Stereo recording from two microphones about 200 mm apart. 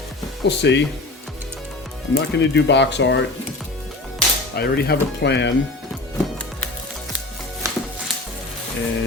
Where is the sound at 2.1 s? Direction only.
60° left (ahead or behind).